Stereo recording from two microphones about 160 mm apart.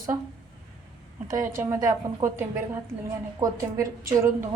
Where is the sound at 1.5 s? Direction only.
20° right (ahead or behind).